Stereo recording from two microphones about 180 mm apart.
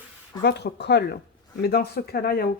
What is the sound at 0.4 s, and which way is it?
Speech, 65° left (ahead or behind).